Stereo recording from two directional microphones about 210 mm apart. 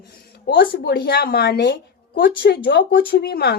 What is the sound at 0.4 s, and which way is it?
A woman's voice, 55° left (ahead or behind).